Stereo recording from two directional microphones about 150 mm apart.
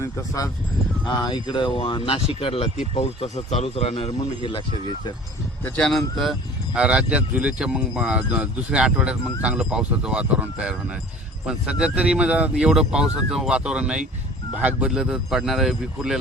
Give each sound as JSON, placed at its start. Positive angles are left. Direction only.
{"t": 0.0, "sound": "speech", "side_deg": 20}
{"t": 5.6, "sound": "speech", "side_deg": 5}
{"t": 6.7, "sound": "speech", "side_deg": -5}